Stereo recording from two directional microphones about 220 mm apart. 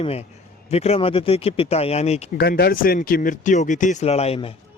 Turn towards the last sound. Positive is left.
turn(degrees=25)  # may be behind; listen again after turning